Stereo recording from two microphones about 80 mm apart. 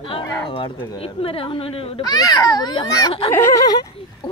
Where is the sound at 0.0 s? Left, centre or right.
Left.